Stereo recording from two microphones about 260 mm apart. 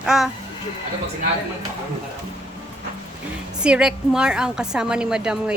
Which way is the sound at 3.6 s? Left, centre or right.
Centre.